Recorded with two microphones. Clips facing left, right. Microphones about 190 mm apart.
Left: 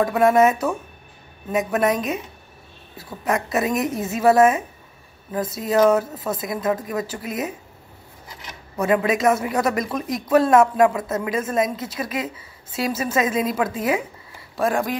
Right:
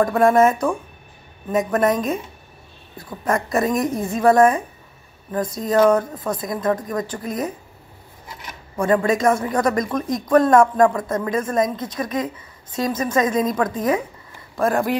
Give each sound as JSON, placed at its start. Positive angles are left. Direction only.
{"t": 0.0, "sound": "speech", "side_deg": 5}
{"t": 8.7, "sound": "a woman's voice", "side_deg": 5}